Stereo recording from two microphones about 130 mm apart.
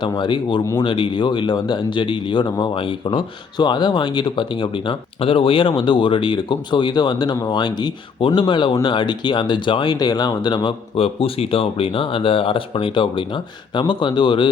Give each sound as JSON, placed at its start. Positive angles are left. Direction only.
{"t": 0.0, "sound": "speech", "side_deg": 35}